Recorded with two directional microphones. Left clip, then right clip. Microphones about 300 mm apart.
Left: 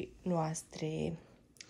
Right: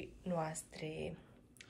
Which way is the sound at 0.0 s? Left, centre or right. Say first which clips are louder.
Left 4 dB; left.